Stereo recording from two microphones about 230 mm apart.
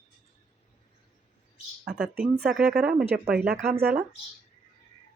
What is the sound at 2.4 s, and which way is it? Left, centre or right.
Speech, centre.